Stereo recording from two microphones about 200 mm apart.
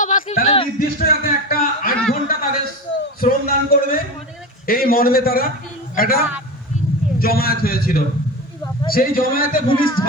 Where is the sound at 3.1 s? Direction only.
45° left (ahead or behind).